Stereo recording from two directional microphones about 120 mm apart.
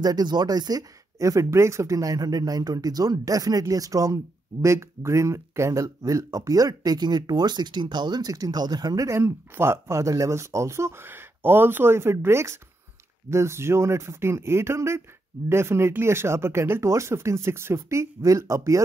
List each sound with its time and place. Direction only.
0.0 s speech: 35° right (ahead or behind)